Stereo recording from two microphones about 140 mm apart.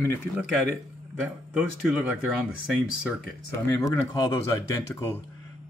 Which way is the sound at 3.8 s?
25° left (ahead or behind).